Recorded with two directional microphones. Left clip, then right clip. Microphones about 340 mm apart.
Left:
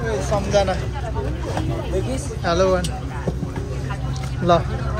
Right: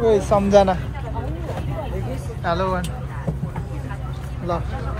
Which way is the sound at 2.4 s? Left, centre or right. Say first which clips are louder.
Left 4 dB; centre.